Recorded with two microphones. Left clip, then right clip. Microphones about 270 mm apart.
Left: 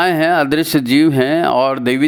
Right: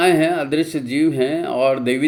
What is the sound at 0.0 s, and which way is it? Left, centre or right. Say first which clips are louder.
Speech: left 3 dB; left.